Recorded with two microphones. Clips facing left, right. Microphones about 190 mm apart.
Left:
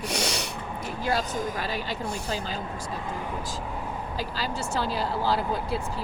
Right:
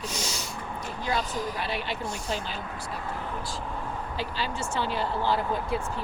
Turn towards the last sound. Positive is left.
turn(degrees=35)  # may be behind; listen again after turning